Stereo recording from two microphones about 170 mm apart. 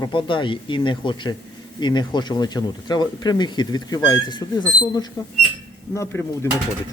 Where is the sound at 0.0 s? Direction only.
30° left (ahead or behind).